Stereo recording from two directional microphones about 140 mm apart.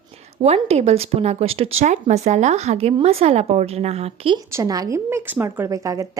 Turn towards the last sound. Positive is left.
turn(degrees=-25)  # may be behind; listen again after turning